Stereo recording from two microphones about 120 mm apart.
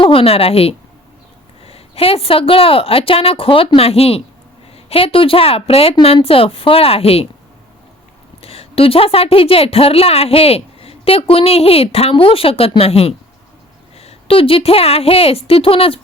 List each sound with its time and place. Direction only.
0.0 s a woman's voice: 50° left (ahead or behind)
8.4 s a woman's voice: 55° left (ahead or behind)